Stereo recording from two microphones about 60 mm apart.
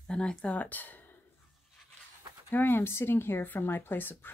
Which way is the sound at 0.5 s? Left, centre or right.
Left.